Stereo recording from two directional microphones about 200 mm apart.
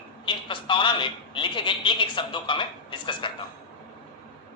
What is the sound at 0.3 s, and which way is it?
A man's voice, 25° left (ahead or behind).